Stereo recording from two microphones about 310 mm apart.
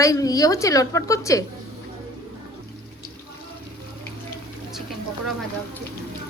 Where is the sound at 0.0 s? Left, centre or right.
Centre.